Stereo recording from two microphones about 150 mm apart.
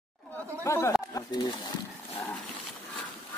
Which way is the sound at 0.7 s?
20° left (ahead or behind).